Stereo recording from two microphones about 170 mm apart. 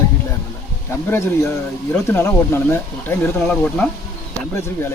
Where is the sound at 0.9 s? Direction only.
15° left (ahead or behind).